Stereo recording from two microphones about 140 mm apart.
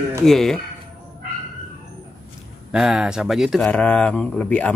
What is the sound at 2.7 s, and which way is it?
Speech, 5° right (ahead or behind).